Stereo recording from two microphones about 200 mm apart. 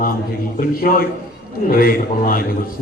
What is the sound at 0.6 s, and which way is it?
A man's voice, 45° left (ahead or behind).